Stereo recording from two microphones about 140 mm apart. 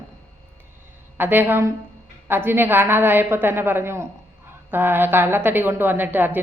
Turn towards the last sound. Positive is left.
turn(degrees=-15)  # may be behind; listen again after turning